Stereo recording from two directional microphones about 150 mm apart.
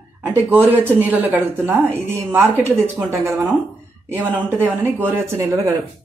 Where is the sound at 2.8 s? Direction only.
15° right (ahead or behind).